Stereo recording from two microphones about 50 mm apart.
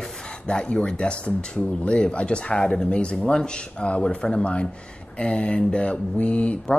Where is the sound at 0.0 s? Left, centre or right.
Centre.